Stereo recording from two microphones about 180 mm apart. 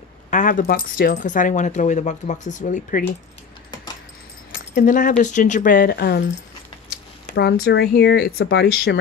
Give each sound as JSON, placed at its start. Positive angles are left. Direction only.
{"t": 0.3, "sound": "speech", "side_deg": 45}
{"t": 4.5, "sound": "keys jangling", "side_deg": 50}
{"t": 5.2, "sound": "speech", "side_deg": 45}
{"t": 7.3, "sound": "speech", "side_deg": 65}